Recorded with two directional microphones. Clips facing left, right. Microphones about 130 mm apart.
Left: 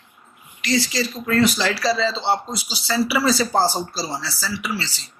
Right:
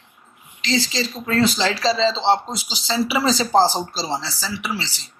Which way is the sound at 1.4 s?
25° right (ahead or behind).